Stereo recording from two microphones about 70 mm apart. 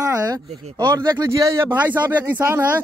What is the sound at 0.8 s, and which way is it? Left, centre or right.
Speech, right.